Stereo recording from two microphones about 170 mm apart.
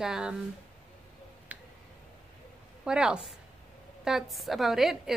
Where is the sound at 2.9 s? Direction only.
5° right (ahead or behind).